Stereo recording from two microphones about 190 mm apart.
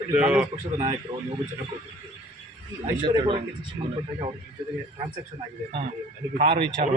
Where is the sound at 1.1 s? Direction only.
20° right (ahead or behind).